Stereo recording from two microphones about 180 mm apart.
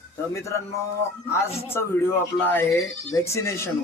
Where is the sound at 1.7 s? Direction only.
15° left (ahead or behind).